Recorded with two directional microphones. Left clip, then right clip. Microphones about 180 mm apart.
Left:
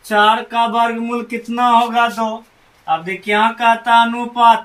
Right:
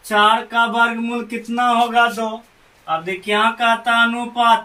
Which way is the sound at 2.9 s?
10° right (ahead or behind).